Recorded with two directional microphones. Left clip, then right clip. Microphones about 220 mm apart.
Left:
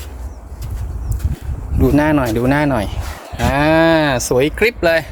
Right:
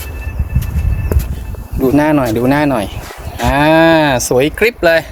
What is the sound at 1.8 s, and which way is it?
Cattle, 10° left (ahead or behind).